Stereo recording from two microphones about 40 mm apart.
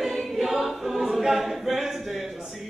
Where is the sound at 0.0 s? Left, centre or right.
Centre.